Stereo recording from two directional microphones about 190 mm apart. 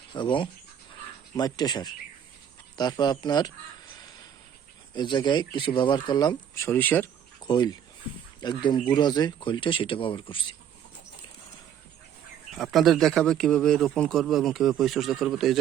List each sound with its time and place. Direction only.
0.1 s speech: 25° left (ahead or behind)
4.9 s speech: 25° left (ahead or behind)
7.4 s speech: 20° left (ahead or behind)
12.5 s a man's voice: centre (ahead or behind)